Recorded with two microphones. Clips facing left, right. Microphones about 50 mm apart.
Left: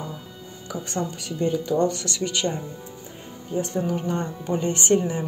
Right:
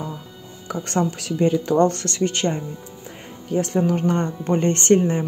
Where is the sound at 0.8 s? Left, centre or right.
Right.